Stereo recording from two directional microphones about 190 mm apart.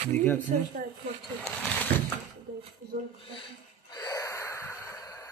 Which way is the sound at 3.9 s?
20° left (ahead or behind).